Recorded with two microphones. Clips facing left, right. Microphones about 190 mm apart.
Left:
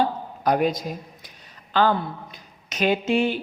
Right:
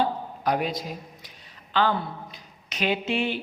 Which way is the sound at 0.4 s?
45° left (ahead or behind).